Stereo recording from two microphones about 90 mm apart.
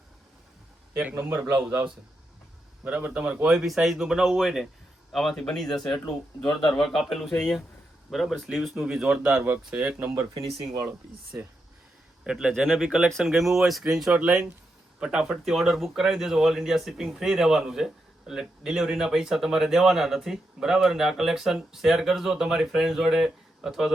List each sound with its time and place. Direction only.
1.1 s a man's voice: 25° right (ahead or behind)
2.8 s speech: 15° right (ahead or behind)
12.2 s speech: 5° right (ahead or behind)